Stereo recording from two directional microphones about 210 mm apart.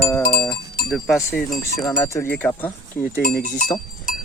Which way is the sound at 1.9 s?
15° left (ahead or behind).